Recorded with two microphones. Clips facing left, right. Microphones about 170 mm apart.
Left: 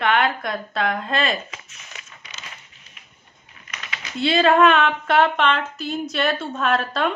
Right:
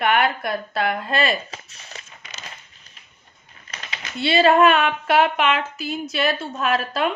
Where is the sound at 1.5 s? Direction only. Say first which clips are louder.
Right 2 dB; 35° right (ahead or behind).